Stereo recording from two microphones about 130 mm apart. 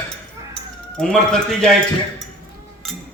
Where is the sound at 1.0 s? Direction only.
5° left (ahead or behind).